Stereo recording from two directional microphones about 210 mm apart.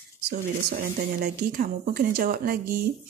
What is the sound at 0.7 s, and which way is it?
Speech, 40° right (ahead or behind).